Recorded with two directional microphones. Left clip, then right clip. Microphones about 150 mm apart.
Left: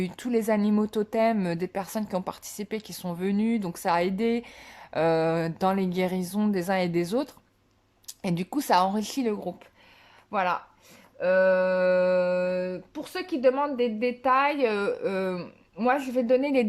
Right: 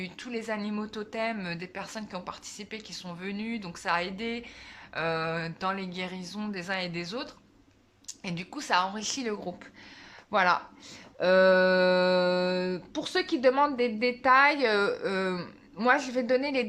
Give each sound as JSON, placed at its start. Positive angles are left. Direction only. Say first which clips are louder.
{"t": 0.0, "sound": "speech", "louder": "left 9 dB", "side_deg": 40}